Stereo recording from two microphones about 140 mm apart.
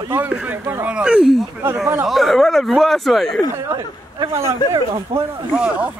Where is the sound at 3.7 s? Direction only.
25° right (ahead or behind).